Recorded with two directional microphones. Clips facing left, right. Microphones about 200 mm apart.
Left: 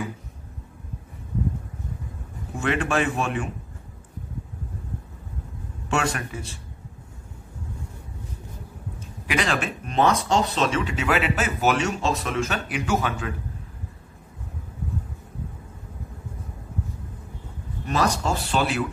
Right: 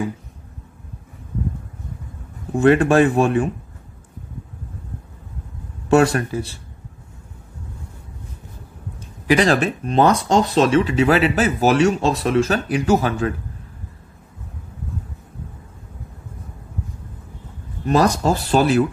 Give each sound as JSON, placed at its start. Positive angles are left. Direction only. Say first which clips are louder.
{"t": 2.5, "sound": "speech", "louder": "right 10 dB", "side_deg": -35}
{"t": 5.9, "sound": "speech", "louder": "right 11 dB", "side_deg": -35}
{"t": 9.3, "sound": "speech", "louder": "right 9 dB", "side_deg": -35}
{"t": 17.8, "sound": "speech", "louder": "right 7 dB", "side_deg": -40}